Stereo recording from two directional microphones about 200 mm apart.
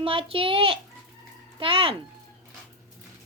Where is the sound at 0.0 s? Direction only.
25° right (ahead or behind).